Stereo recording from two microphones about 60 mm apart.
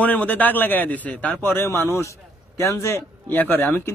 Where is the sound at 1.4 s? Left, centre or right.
Left.